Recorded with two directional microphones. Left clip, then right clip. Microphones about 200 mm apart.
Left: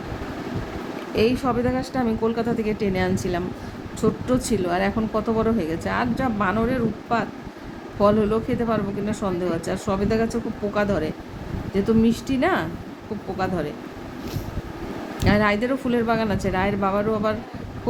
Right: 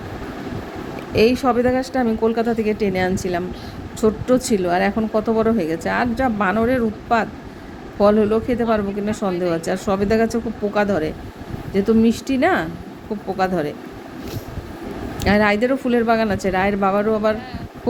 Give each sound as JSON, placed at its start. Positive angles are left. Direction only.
{"t": 1.1, "sound": "speech", "side_deg": -20}
{"t": 10.8, "sound": "speech", "side_deg": -10}
{"t": 15.2, "sound": "speech", "side_deg": -10}